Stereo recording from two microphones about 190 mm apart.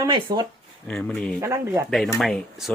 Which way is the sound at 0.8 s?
5° left (ahead or behind).